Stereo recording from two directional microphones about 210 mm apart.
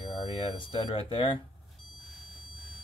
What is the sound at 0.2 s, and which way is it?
Speech, 25° left (ahead or behind).